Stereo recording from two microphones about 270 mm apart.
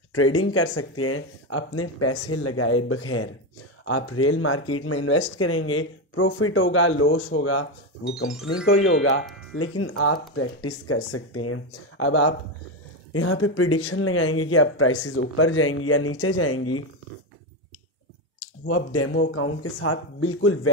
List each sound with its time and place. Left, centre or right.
0.1 s speech: left
9.2 s music: centre
9.6 s speech: left
18.7 s speech: left